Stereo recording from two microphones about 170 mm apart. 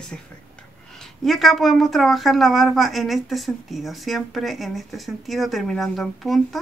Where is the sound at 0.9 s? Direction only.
Centre (ahead or behind).